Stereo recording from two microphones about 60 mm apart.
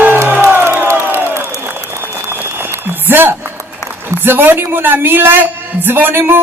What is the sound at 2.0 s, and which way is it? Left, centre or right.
Applause, right.